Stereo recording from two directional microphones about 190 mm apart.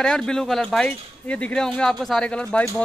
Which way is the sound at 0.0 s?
5° left (ahead or behind).